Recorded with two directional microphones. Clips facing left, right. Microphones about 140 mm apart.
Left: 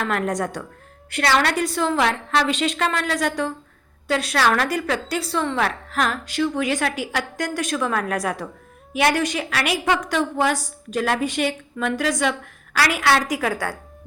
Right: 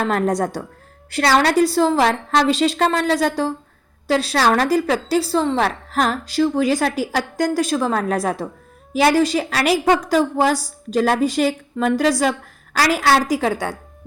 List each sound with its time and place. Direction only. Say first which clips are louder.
0.0 s a woman's voice: right 4 dB; 35° right (ahead or behind)